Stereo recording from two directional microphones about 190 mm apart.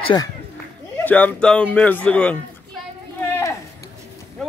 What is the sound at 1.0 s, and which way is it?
A man's voice, 10° left (ahead or behind).